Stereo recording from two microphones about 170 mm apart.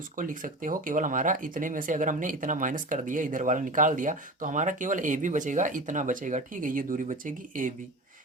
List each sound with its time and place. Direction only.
0.2 s speech: 50° right (ahead or behind)